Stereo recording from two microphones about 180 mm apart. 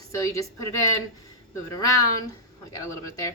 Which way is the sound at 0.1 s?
15° left (ahead or behind).